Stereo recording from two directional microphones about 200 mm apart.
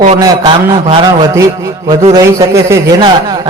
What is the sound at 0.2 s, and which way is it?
Speech, 25° right (ahead or behind).